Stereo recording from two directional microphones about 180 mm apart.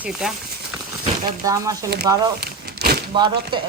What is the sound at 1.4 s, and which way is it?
Speech, 20° right (ahead or behind).